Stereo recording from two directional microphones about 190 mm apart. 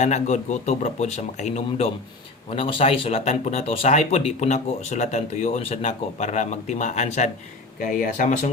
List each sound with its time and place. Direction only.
0.0 s speech: 35° left (ahead or behind)